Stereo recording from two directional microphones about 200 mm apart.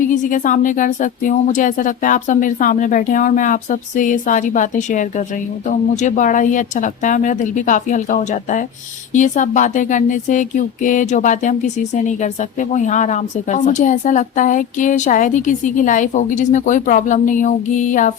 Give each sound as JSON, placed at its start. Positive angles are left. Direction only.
{"t": 0.1, "sound": "speech", "side_deg": 40}